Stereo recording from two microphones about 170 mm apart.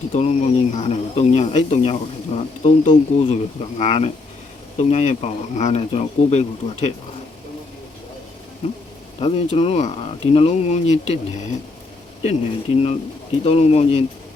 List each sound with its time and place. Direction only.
0.1 s speech: 40° left (ahead or behind)
9.1 s speech: 35° left (ahead or behind)
12.2 s speech: 40° left (ahead or behind)